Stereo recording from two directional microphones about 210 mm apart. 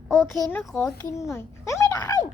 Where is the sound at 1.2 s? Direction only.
15° left (ahead or behind).